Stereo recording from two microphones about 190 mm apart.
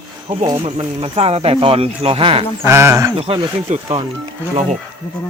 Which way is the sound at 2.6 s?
15° right (ahead or behind).